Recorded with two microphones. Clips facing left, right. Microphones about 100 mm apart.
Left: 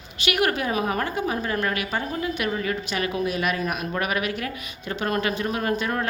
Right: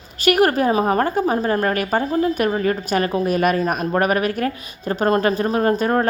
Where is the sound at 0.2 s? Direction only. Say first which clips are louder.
Right 8 dB; 45° right (ahead or behind).